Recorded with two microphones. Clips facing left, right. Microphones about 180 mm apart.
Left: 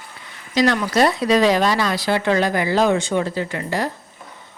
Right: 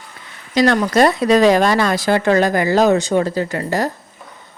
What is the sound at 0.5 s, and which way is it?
Speech, 50° right (ahead or behind).